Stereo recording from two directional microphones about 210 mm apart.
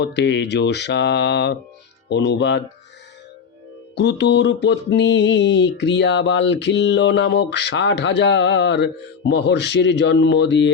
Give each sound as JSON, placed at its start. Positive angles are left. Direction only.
{"t": 0.0, "sound": "speech", "side_deg": 55}
{"t": 3.9, "sound": "speech", "side_deg": 55}